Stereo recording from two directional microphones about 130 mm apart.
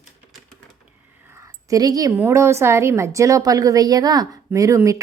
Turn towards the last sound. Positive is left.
turn(degrees=-25)  # may be behind; listen again after turning